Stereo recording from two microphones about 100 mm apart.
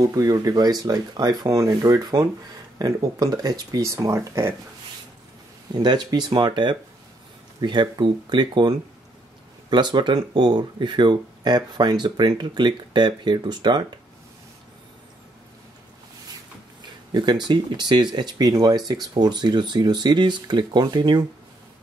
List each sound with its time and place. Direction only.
0.0 s speech: 35° right (ahead or behind)
5.7 s speech: 45° right (ahead or behind)
16.8 s speech: 45° right (ahead or behind)